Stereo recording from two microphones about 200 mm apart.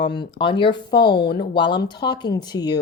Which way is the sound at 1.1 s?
55° left (ahead or behind).